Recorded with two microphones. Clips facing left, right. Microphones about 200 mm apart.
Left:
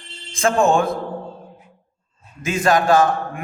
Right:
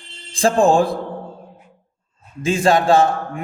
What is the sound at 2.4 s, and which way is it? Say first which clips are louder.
Speech: right 2 dB; 30° right (ahead or behind).